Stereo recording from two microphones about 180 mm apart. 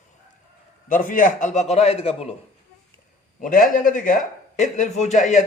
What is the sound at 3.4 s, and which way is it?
A man's voice, 50° left (ahead or behind).